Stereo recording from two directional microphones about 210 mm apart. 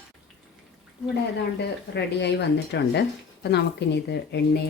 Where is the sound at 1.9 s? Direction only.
55° left (ahead or behind).